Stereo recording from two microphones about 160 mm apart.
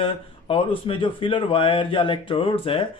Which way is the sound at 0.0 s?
35° left (ahead or behind).